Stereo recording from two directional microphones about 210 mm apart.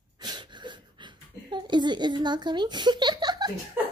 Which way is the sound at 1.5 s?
20° right (ahead or behind).